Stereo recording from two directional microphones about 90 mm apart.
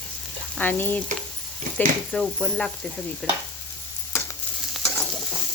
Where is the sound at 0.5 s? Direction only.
20° left (ahead or behind).